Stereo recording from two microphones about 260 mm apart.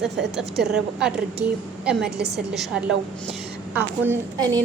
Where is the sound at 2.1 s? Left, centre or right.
Right.